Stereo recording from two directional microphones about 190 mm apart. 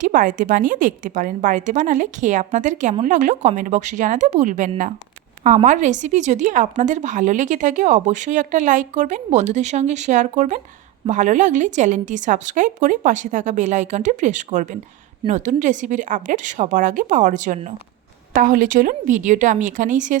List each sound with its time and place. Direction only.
0.0 s a woman's voice: 45° right (ahead or behind)